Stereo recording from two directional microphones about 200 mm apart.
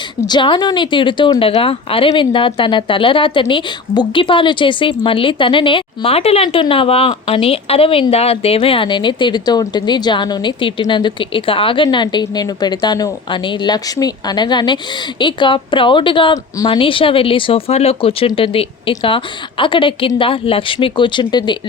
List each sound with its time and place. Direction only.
0.3 s a woman's voice: 25° left (ahead or behind)